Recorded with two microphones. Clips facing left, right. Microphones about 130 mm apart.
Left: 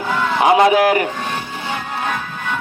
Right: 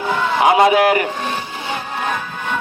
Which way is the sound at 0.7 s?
35° left (ahead or behind).